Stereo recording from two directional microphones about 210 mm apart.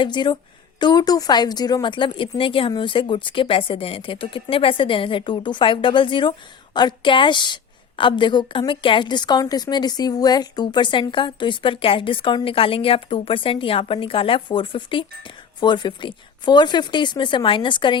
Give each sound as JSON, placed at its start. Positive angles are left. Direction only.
{"t": 0.0, "sound": "a woman's voice", "side_deg": 20}